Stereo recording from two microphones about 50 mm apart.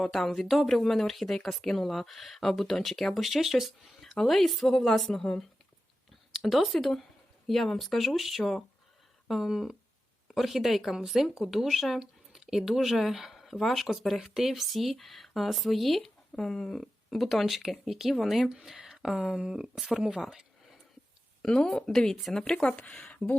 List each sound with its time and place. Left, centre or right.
0.0 s speech: centre
6.3 s speech: centre
21.4 s speech: centre; by 23.4 s left